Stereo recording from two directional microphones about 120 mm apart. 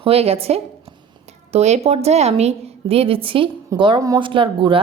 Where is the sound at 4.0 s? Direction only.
30° right (ahead or behind).